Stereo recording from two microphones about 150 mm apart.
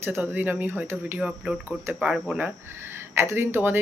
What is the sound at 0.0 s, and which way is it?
Speech, 15° right (ahead or behind).